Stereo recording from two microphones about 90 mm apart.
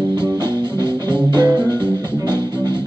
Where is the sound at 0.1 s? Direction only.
55° right (ahead or behind).